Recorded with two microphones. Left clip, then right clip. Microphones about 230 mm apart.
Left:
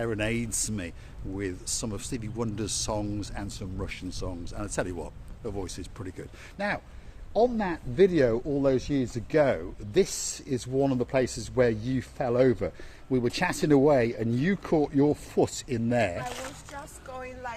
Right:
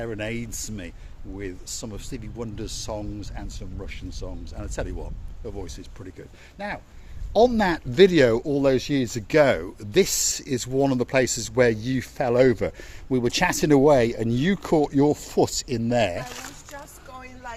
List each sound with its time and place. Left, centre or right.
0.0 s speech: centre
7.3 s speech: right
16.2 s speech: centre